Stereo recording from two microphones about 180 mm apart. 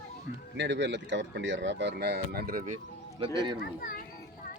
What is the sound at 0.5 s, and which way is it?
Speech, 80° right.